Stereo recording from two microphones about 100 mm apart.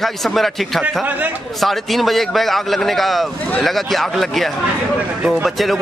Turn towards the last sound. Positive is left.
turn(degrees=0)  # may be behind; listen again after turning